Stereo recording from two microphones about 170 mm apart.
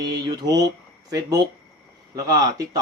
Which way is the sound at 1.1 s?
20° right (ahead or behind).